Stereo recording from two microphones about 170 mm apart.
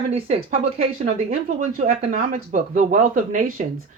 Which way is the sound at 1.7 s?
60° right (ahead or behind).